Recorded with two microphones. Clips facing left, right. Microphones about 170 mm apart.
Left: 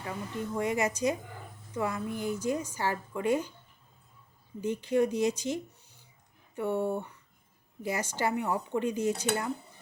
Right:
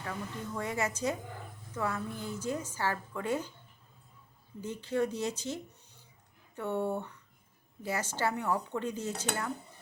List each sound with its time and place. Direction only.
0.0 s a woman's voice: 15° left (ahead or behind)
4.6 s a woman's voice: 15° left (ahead or behind)